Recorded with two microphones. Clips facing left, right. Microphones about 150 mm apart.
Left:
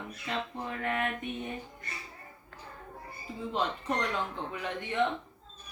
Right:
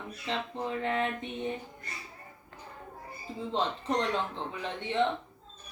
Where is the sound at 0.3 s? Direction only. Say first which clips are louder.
Right 2 dB; 25° right (ahead or behind).